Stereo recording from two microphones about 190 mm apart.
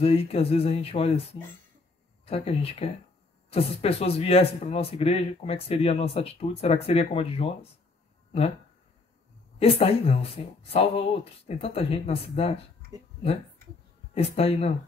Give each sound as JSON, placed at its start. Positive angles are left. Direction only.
{"t": 0.0, "sound": "speech", "side_deg": 30}
{"t": 2.2, "sound": "speech", "side_deg": 30}
{"t": 9.6, "sound": "speech", "side_deg": 30}
{"t": 14.1, "sound": "speech", "side_deg": 30}